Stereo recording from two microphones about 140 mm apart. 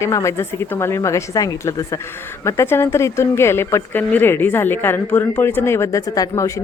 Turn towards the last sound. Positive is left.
turn(degrees=25)  # may be behind; listen again after turning